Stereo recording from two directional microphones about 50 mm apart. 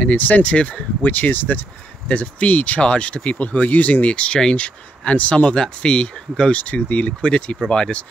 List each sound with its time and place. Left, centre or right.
0.0 s speech: left
6.6 s speech: left